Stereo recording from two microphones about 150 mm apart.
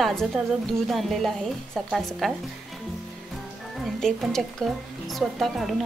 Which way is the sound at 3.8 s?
Centre (ahead or behind).